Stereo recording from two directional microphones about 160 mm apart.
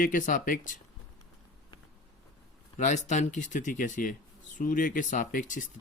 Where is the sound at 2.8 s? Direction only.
50° left (ahead or behind).